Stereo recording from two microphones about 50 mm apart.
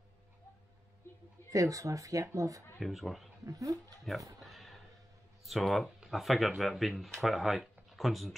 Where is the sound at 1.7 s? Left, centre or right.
Right.